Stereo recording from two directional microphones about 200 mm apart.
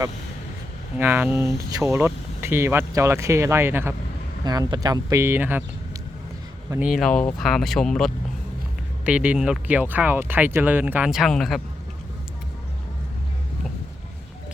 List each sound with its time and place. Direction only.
0.9 s speech: 10° right (ahead or behind)
6.7 s speech: 5° right (ahead or behind)